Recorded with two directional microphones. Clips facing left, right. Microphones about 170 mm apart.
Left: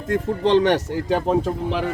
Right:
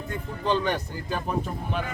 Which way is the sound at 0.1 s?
90° left.